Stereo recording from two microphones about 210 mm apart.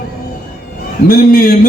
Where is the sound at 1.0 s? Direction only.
45° left (ahead or behind).